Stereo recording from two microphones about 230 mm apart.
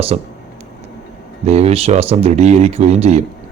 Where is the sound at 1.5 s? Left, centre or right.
Right.